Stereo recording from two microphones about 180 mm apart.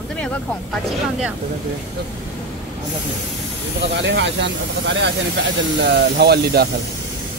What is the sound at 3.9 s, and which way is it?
Speech, 80° right.